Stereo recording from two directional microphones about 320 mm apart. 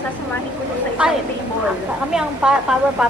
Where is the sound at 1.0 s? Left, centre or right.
Centre.